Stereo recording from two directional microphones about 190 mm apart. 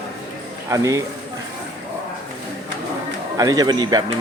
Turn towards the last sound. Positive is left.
turn(degrees=-20)  # may be behind; listen again after turning